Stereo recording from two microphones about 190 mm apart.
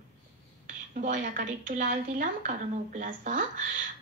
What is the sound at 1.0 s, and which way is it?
Speech, 45° right (ahead or behind).